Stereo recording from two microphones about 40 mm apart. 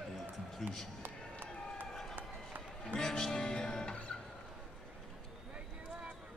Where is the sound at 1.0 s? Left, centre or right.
Right.